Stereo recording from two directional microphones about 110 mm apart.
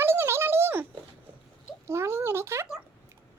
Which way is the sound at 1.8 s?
25° right (ahead or behind).